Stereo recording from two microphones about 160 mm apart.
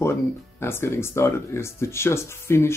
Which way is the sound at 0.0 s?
15° left (ahead or behind).